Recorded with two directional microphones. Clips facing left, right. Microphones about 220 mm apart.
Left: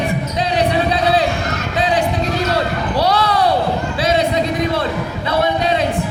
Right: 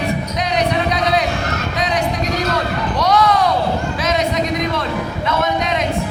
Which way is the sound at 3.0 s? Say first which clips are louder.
Right 1 dB; 30° left (ahead or behind).